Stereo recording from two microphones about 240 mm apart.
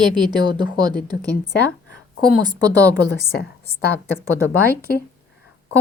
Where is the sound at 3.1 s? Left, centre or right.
Right.